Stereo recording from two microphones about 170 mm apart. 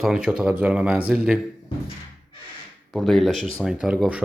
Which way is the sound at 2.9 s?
Centre (ahead or behind).